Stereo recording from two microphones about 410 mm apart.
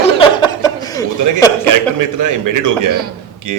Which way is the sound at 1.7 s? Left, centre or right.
Right.